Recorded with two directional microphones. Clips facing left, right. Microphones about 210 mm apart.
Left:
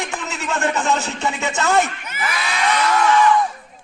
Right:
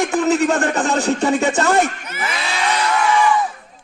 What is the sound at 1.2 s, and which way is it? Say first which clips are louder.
Speech: right 6 dB; 50° right (ahead or behind).